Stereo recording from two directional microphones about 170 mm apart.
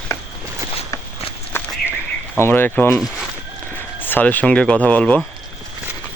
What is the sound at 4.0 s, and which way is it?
Speech, 10° left (ahead or behind).